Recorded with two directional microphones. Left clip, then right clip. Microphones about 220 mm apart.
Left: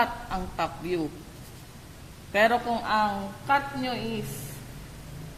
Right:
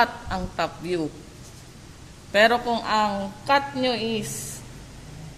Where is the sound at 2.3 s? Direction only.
20° right (ahead or behind); by 4.0 s 35° right (ahead or behind).